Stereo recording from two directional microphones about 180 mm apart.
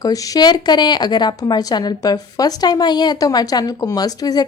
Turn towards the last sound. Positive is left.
turn(degrees=20)  # may be behind; listen again after turning